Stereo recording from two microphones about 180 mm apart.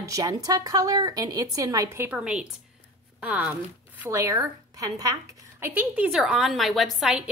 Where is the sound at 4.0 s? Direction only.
15° right (ahead or behind).